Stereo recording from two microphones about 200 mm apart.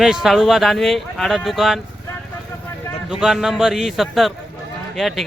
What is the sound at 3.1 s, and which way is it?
Speech, 5° right (ahead or behind).